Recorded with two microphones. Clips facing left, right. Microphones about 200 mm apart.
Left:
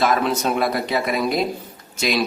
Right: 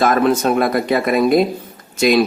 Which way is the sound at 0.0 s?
50° right (ahead or behind).